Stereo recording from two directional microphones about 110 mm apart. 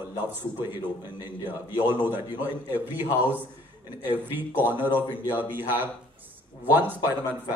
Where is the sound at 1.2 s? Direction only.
20° right (ahead or behind).